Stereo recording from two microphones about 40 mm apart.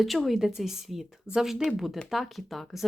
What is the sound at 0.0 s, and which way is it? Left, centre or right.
Speech, centre.